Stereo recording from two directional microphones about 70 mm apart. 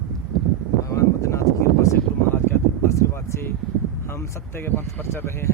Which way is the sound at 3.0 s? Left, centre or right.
Left.